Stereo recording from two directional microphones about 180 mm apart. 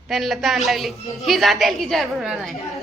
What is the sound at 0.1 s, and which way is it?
A woman's voice, centre (ahead or behind).